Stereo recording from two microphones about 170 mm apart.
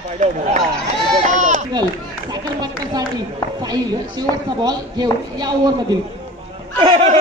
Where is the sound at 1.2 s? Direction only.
45° right (ahead or behind).